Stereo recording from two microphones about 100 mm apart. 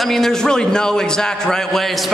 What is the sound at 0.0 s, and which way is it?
A man's voice, 5° left (ahead or behind).